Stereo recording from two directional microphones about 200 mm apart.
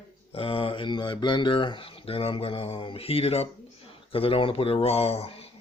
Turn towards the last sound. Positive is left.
turn(degrees=30)  # may be behind; listen again after turning